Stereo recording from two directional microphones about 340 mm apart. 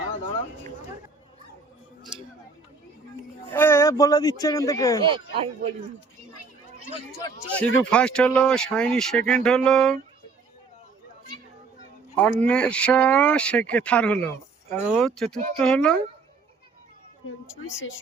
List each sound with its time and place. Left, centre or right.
3.5 s speech: centre
5.0 s speech: centre
6.9 s speech: centre
12.1 s speech: centre